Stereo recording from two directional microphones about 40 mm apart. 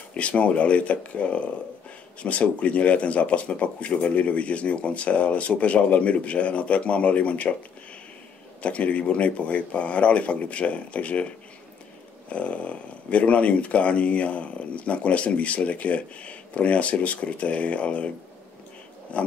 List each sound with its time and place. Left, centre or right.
0.1 s speech: left
8.6 s speech: left